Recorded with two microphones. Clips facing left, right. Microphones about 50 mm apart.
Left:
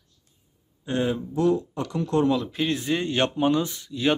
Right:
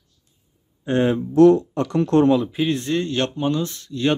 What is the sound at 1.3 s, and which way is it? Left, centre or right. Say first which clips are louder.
Speech: right 11 dB; right.